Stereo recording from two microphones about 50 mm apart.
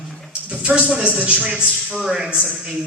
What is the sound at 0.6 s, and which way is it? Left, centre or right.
Speech, right.